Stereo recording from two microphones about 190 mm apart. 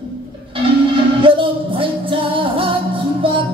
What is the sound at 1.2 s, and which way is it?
Music, 25° right (ahead or behind).